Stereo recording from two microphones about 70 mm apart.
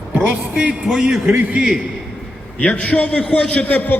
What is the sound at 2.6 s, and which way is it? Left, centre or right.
A man's voice, centre.